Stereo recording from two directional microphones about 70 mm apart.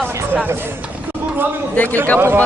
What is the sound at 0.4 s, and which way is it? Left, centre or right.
Speech, right.